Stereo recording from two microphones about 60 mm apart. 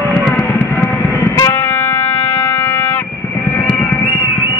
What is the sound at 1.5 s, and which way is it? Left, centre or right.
Music, left.